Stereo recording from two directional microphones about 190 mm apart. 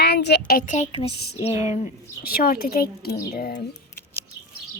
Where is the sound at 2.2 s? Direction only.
50° left (ahead or behind).